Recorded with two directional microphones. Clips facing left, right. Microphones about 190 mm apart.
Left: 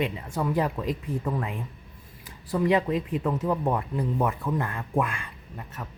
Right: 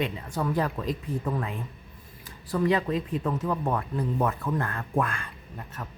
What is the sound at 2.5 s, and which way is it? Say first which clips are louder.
A man's voice: left 1 dB; 20° left (ahead or behind).